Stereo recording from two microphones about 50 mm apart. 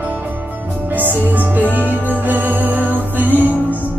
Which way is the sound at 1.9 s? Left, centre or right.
Right.